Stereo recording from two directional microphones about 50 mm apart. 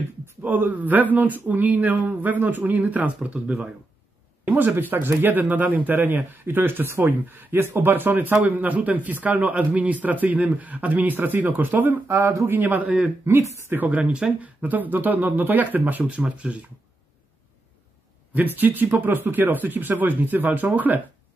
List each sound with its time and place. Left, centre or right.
0.4 s speech: right
4.5 s speech: right
13.2 s speech: right
13.7 s speech: right
16.1 s speech: right
18.3 s speech: right